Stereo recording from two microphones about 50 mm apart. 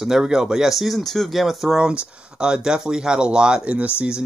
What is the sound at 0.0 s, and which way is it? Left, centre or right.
Speech, centre.